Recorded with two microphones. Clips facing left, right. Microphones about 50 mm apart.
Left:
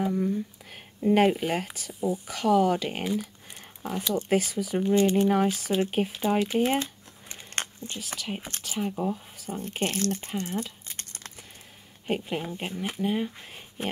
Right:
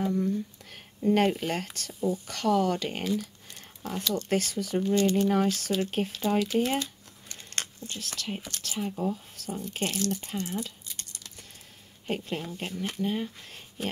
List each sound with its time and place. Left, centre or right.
0.0 s speech: centre
8.0 s speech: centre
8.4 s speech: left
8.6 s speech: centre
9.5 s speech: left
10.9 s a sound: left
12.1 s speech: centre
13.8 s a sound: left